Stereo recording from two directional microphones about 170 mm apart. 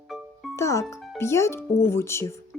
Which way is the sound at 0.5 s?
15° left (ahead or behind).